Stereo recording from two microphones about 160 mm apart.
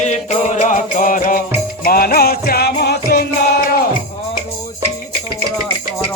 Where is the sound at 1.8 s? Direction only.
65° left (ahead or behind).